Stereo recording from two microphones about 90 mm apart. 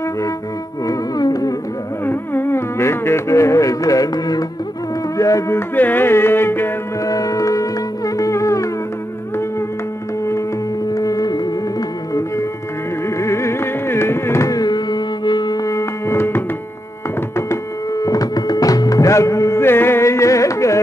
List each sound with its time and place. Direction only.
0.8 s music: 45° left (ahead or behind)
2.0 s music: 25° left (ahead or behind); by 4.5 s 45° left (ahead or behind)
5.1 s speech: 40° left (ahead or behind)
5.8 s music: 20° left (ahead or behind)
7.1 s music: 40° left (ahead or behind)
11.0 s music: 40° left (ahead or behind)
15.6 s music: 35° left (ahead or behind)
17.5 s music: 40° left (ahead or behind)